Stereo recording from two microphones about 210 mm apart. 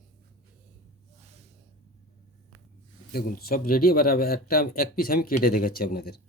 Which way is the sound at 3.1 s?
45° left (ahead or behind).